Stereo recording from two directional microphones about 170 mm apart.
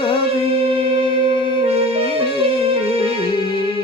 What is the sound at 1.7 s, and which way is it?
Music, 35° right (ahead or behind).